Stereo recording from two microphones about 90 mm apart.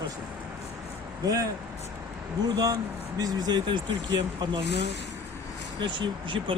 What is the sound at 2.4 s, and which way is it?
Speech, 50° right (ahead or behind).